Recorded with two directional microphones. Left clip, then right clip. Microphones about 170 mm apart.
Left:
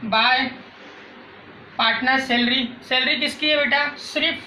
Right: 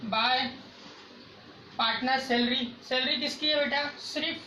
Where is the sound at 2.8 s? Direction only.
20° right (ahead or behind).